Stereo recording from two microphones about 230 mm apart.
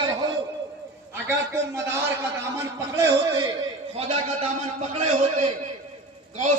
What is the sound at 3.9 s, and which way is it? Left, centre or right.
Speech, right.